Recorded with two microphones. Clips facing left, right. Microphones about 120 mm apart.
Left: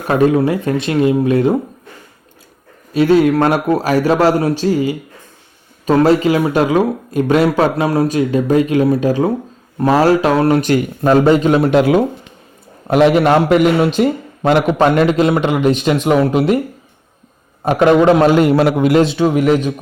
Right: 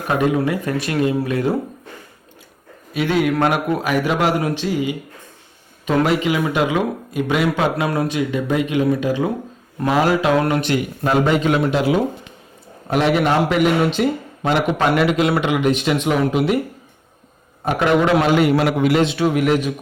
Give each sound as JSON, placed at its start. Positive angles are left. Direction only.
{"t": 0.3, "sound": "speech", "side_deg": 30}
{"t": 2.9, "sound": "a man's voice", "side_deg": 35}
{"t": 11.7, "sound": "speech", "side_deg": 60}
{"t": 12.9, "sound": "a man's voice", "side_deg": 45}
{"t": 14.8, "sound": "a man's voice", "side_deg": 35}
{"t": 17.7, "sound": "a man's voice", "side_deg": 35}